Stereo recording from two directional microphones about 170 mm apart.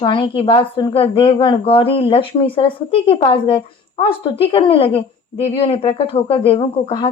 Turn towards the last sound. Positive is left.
turn(degrees=30)  # may be behind; listen again after turning